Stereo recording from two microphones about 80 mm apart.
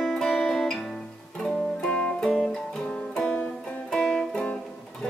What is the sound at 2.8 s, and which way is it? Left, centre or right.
Music, centre.